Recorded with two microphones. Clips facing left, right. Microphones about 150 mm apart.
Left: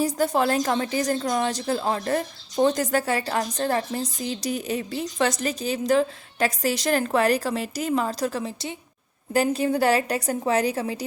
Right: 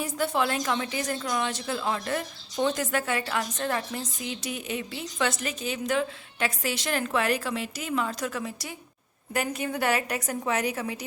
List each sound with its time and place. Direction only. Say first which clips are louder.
0.0 s a woman's voice: left 5 dB; 40° left (ahead or behind)